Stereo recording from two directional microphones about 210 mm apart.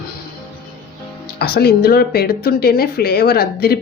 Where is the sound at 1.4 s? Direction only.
50° left (ahead or behind).